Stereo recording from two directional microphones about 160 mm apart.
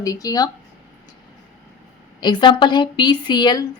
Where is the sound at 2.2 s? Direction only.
30° left (ahead or behind).